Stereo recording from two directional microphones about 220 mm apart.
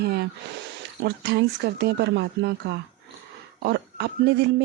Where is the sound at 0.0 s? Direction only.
45° right (ahead or behind).